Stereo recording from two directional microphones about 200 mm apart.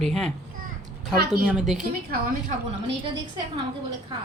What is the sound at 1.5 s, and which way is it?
Speech, centre (ahead or behind).